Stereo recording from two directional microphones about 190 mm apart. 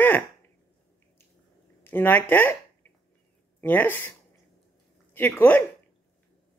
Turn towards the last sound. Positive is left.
turn(degrees=10)  # may be behind; listen again after turning